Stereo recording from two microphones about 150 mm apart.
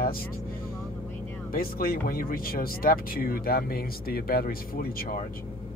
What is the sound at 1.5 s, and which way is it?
Speech, 70° left (ahead or behind).